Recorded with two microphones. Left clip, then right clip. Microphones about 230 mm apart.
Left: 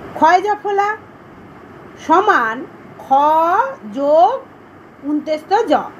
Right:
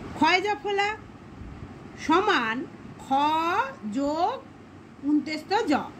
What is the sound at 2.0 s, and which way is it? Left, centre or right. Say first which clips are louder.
A woman's voice: left 10 dB; right.